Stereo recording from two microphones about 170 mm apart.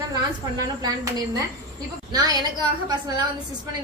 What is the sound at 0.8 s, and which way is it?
A woman's voice, 20° right (ahead or behind).